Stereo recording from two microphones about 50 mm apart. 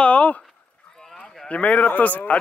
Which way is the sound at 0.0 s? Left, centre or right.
Left.